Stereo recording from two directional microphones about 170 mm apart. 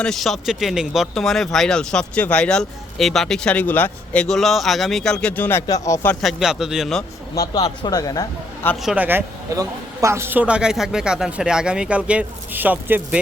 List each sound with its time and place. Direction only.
0.0 s speech: centre (ahead or behind)
6.2 s speech: 5° right (ahead or behind)
7.3 s speech: 20° left (ahead or behind)
8.6 s speech: centre (ahead or behind)